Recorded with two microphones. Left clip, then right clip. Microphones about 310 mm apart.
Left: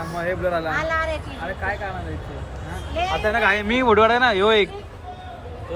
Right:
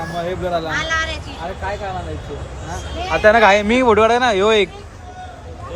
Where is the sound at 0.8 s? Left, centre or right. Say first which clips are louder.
Right 2 dB; left.